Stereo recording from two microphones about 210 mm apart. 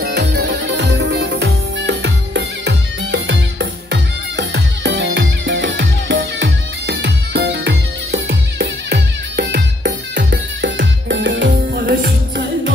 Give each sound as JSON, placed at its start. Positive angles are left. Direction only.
{"t": 0.0, "sound": "music", "side_deg": -55}